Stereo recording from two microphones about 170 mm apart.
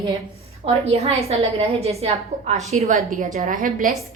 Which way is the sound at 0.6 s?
35° right (ahead or behind).